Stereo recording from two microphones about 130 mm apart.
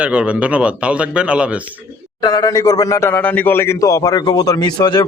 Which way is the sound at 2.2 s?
30° left (ahead or behind).